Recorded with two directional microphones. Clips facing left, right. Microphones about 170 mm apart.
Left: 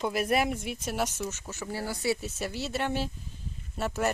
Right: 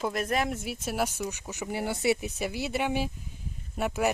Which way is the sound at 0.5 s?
5° right (ahead or behind).